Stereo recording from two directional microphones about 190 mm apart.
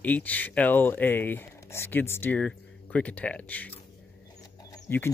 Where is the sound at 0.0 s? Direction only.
10° left (ahead or behind).